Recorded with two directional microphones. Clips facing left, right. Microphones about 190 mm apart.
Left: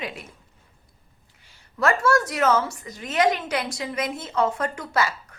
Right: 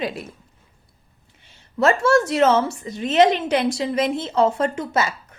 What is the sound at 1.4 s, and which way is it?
A woman's voice, 25° right (ahead or behind).